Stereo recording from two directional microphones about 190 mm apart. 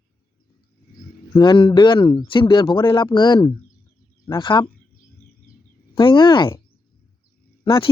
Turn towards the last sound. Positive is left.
turn(degrees=25)  # may be behind; listen again after turning